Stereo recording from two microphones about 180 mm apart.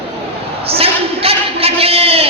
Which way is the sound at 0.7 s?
35° right (ahead or behind).